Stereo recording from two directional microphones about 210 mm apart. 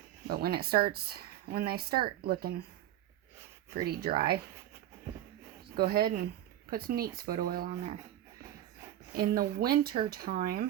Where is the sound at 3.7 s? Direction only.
45° right (ahead or behind).